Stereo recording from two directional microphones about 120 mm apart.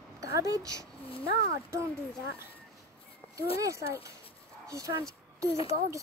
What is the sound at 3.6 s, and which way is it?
Speech, 25° right (ahead or behind).